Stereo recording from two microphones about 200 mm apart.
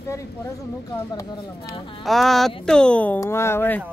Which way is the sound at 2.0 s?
Centre (ahead or behind).